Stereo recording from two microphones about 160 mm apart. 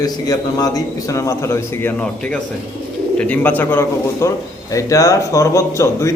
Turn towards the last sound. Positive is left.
turn(degrees=20)  # may be behind; listen again after turning